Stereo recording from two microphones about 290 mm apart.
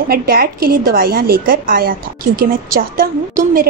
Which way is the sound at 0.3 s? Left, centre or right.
Right.